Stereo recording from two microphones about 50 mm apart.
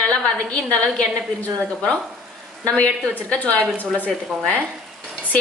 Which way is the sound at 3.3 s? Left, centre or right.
Centre.